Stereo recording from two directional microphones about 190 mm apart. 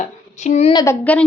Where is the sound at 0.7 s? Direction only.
20° left (ahead or behind).